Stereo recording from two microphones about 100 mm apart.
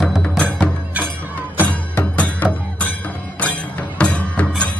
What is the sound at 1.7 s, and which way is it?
Music, 15° left (ahead or behind).